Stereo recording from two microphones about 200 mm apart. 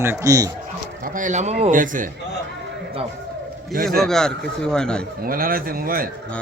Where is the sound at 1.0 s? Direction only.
40° right (ahead or behind).